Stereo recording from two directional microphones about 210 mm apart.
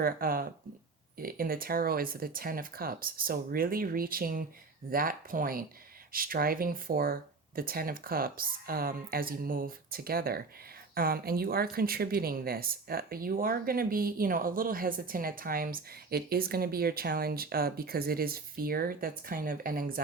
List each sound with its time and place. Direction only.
0.0 s speech: 45° right (ahead or behind)